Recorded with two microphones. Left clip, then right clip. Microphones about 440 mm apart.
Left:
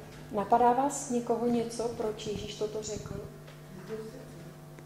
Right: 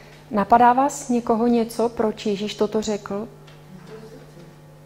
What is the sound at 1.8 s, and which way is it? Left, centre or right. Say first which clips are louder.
Speech: right 11 dB; right.